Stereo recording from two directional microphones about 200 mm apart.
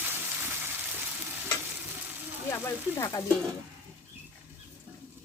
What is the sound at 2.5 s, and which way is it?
Speech, 15° left (ahead or behind).